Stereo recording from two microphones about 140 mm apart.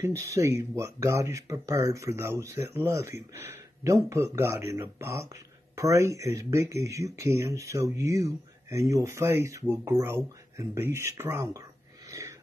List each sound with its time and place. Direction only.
0.0 s speech: 20° right (ahead or behind)
12.1 s wheeze: 20° right (ahead or behind)